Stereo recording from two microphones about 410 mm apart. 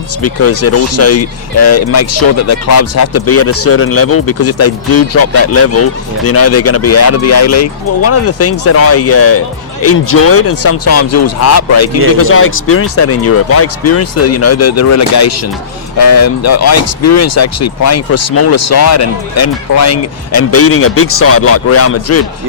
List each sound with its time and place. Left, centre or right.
0.2 s speech: left